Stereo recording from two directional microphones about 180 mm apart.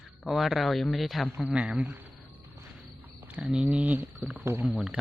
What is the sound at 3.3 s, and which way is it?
Speech, 5° right (ahead or behind).